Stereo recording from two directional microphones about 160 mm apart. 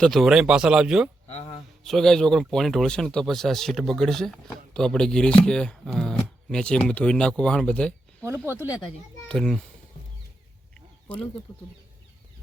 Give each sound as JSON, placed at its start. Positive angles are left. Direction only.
{"t": 0.0, "sound": "speech", "side_deg": 0}
{"t": 9.3, "sound": "speech", "side_deg": 0}
{"t": 11.1, "sound": "speech", "side_deg": 10}